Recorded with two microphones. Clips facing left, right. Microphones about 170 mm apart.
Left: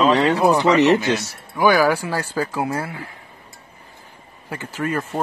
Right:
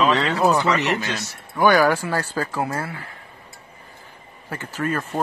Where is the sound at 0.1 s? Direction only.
15° left (ahead or behind).